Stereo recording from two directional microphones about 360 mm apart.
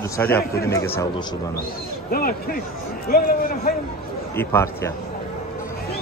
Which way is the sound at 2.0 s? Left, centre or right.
Left.